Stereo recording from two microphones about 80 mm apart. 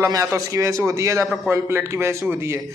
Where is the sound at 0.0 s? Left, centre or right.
Right.